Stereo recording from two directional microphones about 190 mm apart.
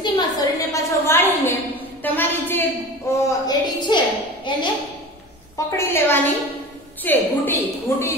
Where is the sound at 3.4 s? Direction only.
25° left (ahead or behind).